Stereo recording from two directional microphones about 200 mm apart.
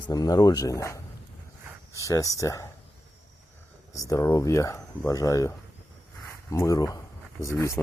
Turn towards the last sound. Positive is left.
turn(degrees=15)  # may be behind; listen again after turning